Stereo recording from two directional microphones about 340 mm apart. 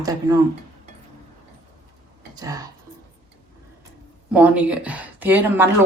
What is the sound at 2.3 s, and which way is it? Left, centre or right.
Speech, centre.